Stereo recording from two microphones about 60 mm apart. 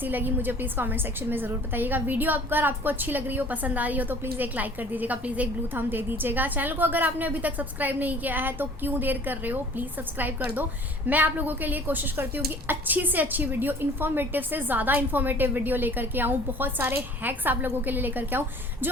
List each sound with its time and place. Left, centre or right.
0.0 s a woman's voice: right